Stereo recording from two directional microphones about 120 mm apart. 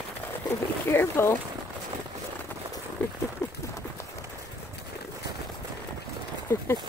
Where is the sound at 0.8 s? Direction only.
20° left (ahead or behind).